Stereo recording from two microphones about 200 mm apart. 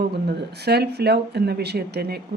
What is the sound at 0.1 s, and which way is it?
Speech, 55° right (ahead or behind).